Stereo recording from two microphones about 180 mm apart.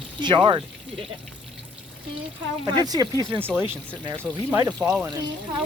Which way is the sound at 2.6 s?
25° right (ahead or behind).